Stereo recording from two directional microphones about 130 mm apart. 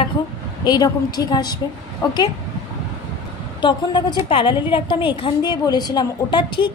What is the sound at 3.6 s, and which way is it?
A woman's voice, 35° left (ahead or behind).